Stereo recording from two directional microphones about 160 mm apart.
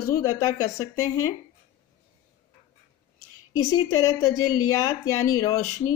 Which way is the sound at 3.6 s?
20° left (ahead or behind).